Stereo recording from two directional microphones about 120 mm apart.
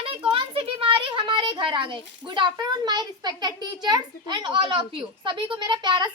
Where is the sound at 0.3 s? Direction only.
45° right (ahead or behind).